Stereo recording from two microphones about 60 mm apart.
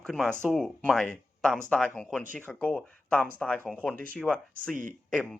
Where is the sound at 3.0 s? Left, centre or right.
Left.